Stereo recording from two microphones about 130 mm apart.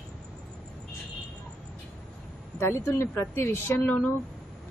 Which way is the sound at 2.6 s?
20° left (ahead or behind).